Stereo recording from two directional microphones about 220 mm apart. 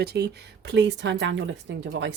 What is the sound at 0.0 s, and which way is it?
Speech, 45° right (ahead or behind).